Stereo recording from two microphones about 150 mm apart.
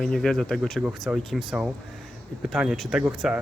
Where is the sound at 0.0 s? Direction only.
5° left (ahead or behind).